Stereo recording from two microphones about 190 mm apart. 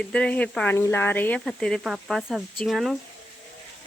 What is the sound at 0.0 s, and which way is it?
Speech, 5° left (ahead or behind).